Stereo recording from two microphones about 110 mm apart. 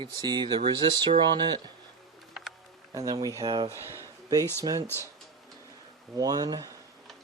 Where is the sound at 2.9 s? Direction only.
35° right (ahead or behind).